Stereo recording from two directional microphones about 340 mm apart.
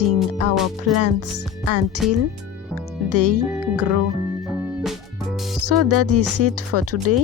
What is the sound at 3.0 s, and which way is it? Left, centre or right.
Speech, right.